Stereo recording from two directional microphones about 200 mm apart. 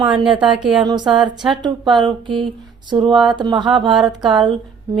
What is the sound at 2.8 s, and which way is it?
Speech, 25° right (ahead or behind).